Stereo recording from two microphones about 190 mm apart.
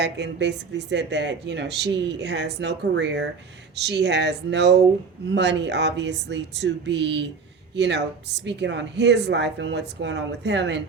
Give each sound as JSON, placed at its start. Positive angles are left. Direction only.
{"t": 0.0, "sound": "speech", "side_deg": -65}